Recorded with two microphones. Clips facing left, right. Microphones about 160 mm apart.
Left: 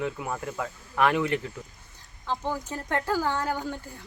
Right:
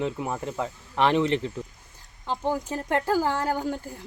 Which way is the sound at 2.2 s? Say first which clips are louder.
Right 3 dB; 15° right (ahead or behind).